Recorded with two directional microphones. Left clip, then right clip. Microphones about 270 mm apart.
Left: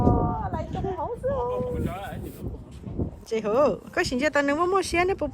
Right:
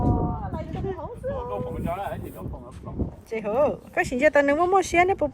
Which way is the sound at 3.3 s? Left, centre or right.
Centre.